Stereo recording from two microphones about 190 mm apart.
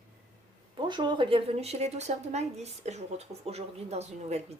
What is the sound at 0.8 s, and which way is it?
Speech, 25° right (ahead or behind).